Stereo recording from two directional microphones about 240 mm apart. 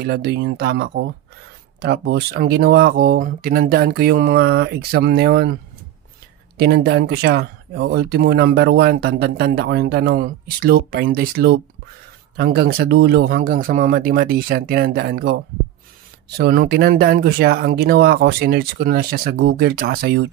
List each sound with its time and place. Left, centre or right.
0.0 s speech: right
6.6 s speech: right